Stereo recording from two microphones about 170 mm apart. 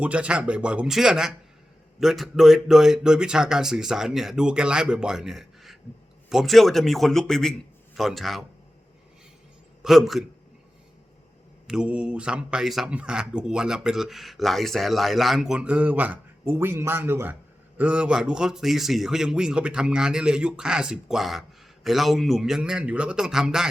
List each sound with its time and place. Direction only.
0.0 s speech: 5° right (ahead or behind)
9.8 s speech: centre (ahead or behind)
11.7 s speech: 5° right (ahead or behind)